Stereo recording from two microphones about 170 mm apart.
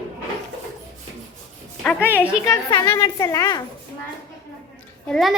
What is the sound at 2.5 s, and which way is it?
A woman's voice, 20° left (ahead or behind).